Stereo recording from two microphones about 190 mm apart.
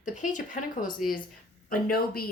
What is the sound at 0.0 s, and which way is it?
Speech, 40° left (ahead or behind).